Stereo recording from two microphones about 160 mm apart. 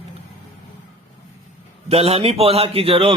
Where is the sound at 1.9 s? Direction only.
40° right (ahead or behind).